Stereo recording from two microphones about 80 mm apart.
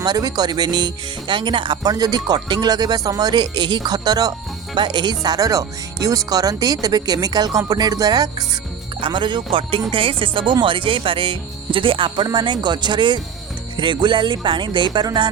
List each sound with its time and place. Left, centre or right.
0.0 s speech: right
1.8 s speech: right
4.8 s speech: right
9.0 s speech: right
13.7 s music: right